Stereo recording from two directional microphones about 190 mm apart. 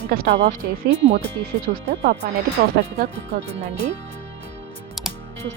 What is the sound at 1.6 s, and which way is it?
Speech, 55° right (ahead or behind).